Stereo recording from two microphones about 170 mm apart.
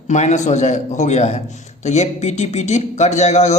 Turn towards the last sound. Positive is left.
turn(degrees=40)  # may be behind; listen again after turning